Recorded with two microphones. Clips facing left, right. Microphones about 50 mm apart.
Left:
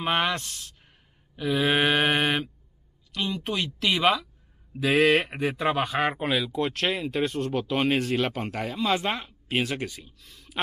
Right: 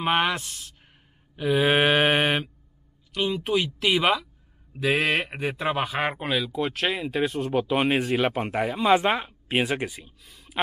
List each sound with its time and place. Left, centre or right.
0.0 s speech: centre